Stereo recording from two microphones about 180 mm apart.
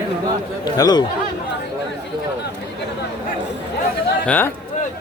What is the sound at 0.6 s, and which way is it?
Speech, 20° left (ahead or behind).